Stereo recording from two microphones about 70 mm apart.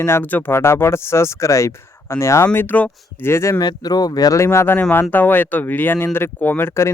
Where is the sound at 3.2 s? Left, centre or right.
Left.